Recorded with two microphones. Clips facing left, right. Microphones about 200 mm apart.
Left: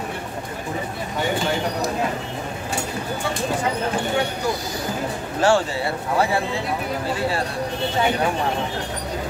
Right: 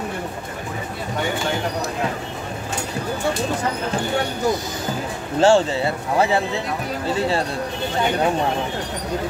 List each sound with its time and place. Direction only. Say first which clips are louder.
5.4 s speech: right 4 dB; 25° right (ahead or behind)